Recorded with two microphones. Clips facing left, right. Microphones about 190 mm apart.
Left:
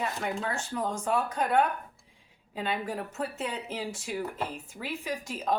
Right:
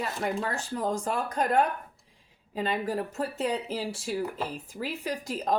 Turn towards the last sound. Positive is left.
turn(degrees=-40)  # may be behind; listen again after turning